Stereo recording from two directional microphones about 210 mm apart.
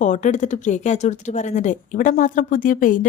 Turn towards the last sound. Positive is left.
turn(degrees=40)  # may be behind; listen again after turning